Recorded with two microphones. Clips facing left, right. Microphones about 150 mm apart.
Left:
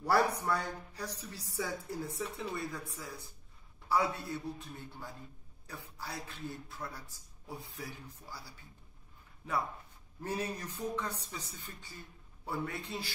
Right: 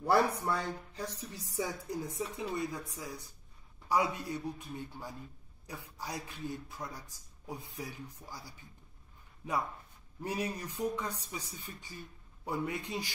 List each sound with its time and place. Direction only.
0.0 s a man's voice: 25° right (ahead or behind)
10.2 s a man's voice: 15° right (ahead or behind)